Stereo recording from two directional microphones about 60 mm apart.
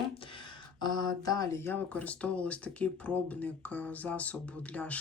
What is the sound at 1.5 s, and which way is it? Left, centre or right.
Speech, left.